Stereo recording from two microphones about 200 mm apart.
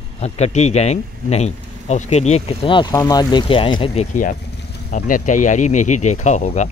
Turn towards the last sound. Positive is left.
turn(degrees=35)  # may be behind; listen again after turning